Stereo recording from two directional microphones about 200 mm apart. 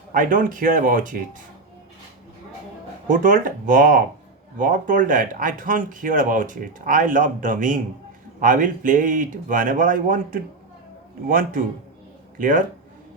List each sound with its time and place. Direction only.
0.1 s speech: 40° right (ahead or behind)
3.1 s speech: 40° right (ahead or behind)